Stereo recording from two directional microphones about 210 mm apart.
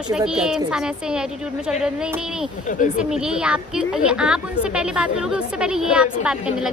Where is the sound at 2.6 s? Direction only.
40° left (ahead or behind).